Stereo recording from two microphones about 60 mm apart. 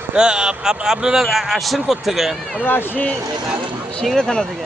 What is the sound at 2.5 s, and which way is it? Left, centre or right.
Speech, left.